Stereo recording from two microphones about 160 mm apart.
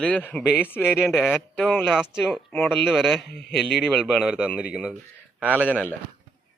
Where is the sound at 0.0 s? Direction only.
10° left (ahead or behind).